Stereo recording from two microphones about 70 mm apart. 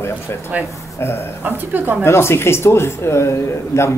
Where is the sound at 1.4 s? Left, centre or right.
Right.